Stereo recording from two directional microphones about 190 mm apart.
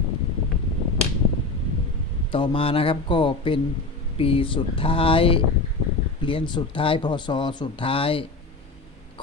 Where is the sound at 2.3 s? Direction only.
25° left (ahead or behind).